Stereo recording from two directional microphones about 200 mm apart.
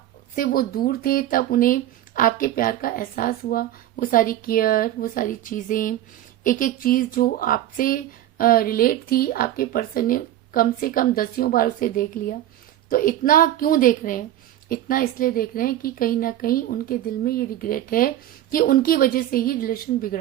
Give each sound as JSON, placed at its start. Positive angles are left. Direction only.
{"t": 0.3, "sound": "a woman's voice", "side_deg": 45}